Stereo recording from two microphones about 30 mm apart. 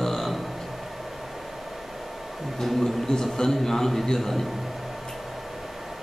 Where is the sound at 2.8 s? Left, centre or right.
Centre.